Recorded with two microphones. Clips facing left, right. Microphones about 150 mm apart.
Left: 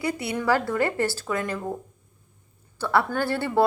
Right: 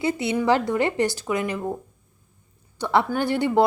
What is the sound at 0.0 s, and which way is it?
Speech, 25° right (ahead or behind).